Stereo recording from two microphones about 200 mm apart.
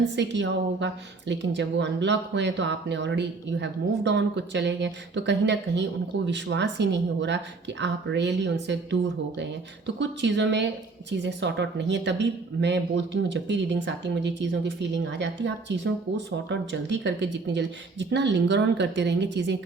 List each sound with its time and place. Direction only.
0.2 s speech: 60° right (ahead or behind)